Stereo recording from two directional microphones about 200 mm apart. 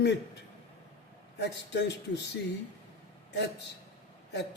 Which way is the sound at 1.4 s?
60° left (ahead or behind).